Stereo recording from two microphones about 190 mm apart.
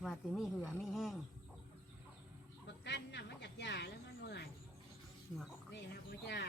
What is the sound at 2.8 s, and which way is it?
Snake, 65° left (ahead or behind).